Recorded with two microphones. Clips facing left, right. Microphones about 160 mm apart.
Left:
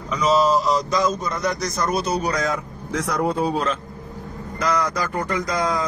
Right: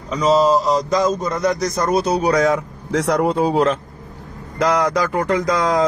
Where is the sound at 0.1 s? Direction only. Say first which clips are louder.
Right 3 dB; 30° right (ahead or behind).